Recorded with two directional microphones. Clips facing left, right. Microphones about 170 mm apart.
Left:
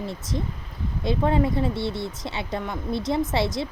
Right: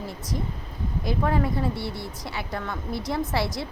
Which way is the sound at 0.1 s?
25° left (ahead or behind).